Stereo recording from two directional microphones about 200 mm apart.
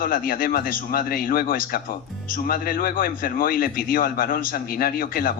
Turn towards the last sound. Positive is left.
turn(degrees=45)  # may be behind; listen again after turning